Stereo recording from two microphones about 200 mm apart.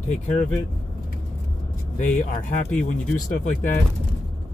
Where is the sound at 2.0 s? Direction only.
40° left (ahead or behind).